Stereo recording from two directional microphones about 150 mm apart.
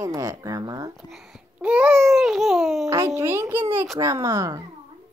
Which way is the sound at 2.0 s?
Centre (ahead or behind).